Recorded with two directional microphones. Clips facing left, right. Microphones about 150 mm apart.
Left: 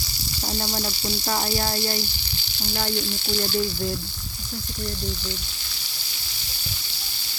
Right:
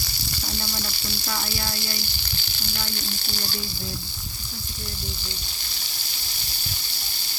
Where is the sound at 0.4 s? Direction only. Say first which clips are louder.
Left 6 dB; 40° left (ahead or behind).